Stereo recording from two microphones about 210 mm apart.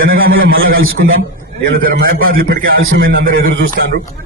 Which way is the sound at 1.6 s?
65° right (ahead or behind).